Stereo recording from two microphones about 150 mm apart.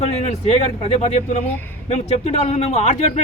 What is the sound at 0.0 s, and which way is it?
Speech, 45° left (ahead or behind).